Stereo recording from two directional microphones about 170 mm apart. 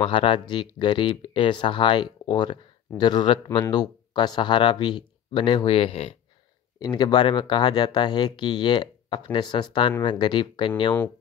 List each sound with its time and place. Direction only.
0.0 s speech: 30° left (ahead or behind)